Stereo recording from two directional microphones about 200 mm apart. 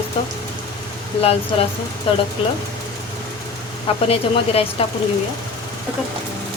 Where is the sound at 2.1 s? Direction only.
25° left (ahead or behind).